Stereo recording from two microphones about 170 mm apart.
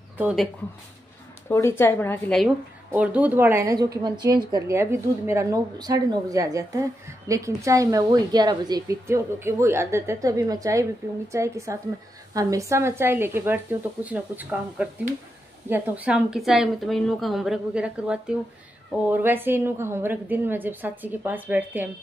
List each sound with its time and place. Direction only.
0.2 s a woman's voice: 5° right (ahead or behind)
1.5 s a woman's voice: 15° left (ahead or behind)
2.9 s a woman's voice: 10° right (ahead or behind)